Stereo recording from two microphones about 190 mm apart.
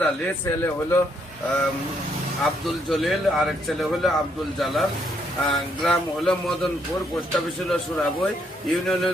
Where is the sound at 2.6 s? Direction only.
Centre (ahead or behind).